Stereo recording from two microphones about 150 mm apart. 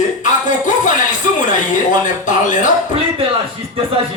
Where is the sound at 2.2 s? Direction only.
55° left (ahead or behind).